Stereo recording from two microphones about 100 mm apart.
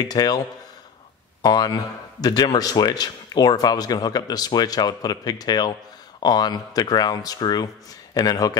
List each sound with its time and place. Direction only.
0.0 s speech: 40° left (ahead or behind)
1.4 s speech: 45° left (ahead or behind)